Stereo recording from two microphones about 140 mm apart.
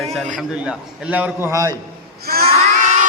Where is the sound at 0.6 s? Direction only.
5° right (ahead or behind).